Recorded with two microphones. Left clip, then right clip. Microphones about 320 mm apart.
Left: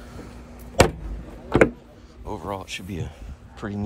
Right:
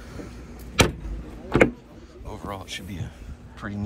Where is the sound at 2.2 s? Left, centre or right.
Centre.